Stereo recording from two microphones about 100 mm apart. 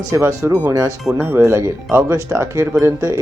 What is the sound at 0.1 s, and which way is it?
Speech, 30° right (ahead or behind).